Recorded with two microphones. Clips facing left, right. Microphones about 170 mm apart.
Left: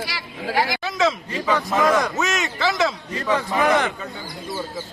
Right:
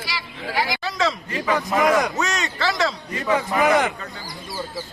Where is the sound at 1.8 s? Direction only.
15° right (ahead or behind).